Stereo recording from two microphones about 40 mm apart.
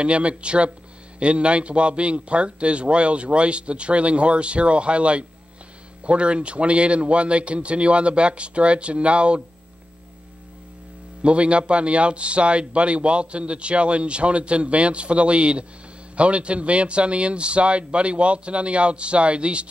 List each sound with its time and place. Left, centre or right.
0.0 s speech: right
11.2 s speech: right